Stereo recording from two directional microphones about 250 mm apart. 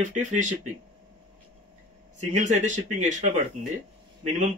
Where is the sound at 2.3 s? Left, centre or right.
Right.